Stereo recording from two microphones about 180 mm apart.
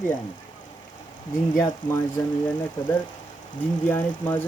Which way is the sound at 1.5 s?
15° left (ahead or behind).